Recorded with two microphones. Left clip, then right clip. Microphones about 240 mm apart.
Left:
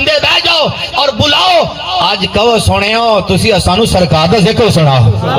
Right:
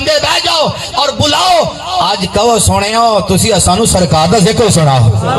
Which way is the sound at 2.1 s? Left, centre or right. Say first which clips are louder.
Even; left.